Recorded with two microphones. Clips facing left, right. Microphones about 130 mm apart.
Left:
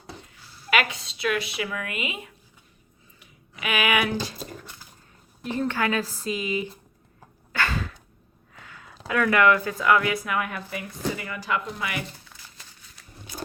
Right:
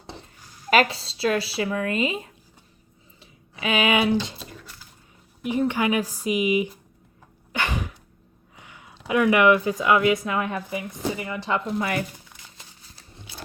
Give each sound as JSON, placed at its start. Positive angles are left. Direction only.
{"t": 0.7, "sound": "speech", "side_deg": -35}
{"t": 5.4, "sound": "speech", "side_deg": -10}
{"t": 7.5, "sound": "sneeze", "side_deg": -20}
{"t": 8.5, "sound": "a sound", "side_deg": -20}
{"t": 9.0, "sound": "a woman's voice", "side_deg": -20}
{"t": 12.3, "sound": "a sound", "side_deg": -20}